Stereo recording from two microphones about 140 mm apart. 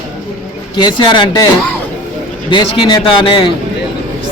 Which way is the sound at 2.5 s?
35° left (ahead or behind).